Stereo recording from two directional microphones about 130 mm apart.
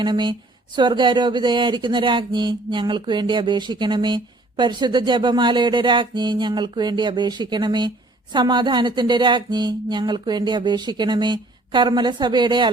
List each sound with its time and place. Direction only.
0.0 s speech: 35° right (ahead or behind)